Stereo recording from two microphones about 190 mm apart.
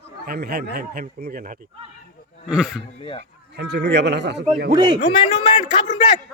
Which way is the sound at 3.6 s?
65° right (ahead or behind).